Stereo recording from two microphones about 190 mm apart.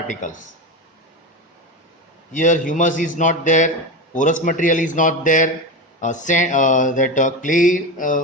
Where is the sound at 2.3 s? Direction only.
40° left (ahead or behind).